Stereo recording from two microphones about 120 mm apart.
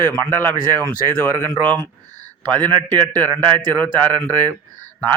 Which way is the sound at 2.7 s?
40° right (ahead or behind).